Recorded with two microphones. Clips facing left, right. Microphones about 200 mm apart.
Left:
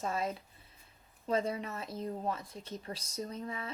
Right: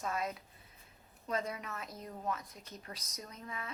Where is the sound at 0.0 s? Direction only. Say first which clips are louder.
Left 3 dB; 30° left (ahead or behind).